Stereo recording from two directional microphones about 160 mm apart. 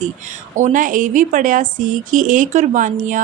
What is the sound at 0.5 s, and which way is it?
Speech, 50° right (ahead or behind).